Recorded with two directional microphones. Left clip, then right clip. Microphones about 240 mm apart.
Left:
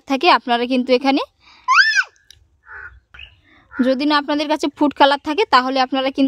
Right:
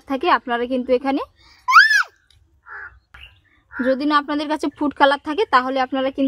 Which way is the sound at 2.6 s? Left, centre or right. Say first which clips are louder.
Even; centre.